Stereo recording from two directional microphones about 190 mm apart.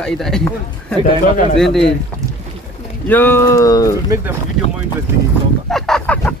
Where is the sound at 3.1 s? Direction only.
10° left (ahead or behind).